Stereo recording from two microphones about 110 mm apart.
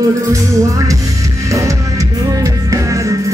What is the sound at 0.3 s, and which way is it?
Music, 30° right (ahead or behind).